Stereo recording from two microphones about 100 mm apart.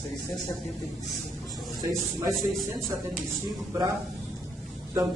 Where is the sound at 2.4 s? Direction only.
Centre (ahead or behind).